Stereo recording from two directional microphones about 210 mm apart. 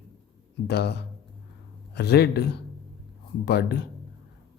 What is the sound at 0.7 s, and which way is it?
Speech, 50° left (ahead or behind).